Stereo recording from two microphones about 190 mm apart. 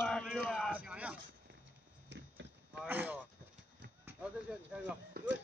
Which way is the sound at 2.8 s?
10° right (ahead or behind).